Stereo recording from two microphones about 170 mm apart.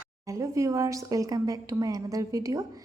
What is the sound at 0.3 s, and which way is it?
A woman's voice, 20° right (ahead or behind).